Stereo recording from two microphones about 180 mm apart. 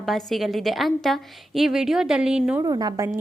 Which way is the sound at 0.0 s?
Centre (ahead or behind).